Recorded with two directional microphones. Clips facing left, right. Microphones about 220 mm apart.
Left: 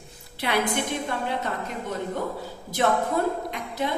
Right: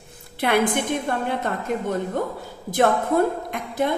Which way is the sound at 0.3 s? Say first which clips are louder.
Right 5 dB; 50° right (ahead or behind).